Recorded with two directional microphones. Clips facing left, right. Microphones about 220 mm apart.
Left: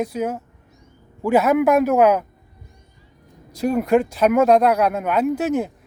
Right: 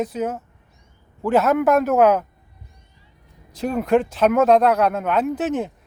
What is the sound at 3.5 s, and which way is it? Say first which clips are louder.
Speech: left 1 dB; 10° left (ahead or behind).